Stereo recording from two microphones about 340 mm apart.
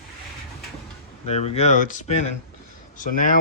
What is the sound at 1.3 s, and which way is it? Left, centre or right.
Speech, centre.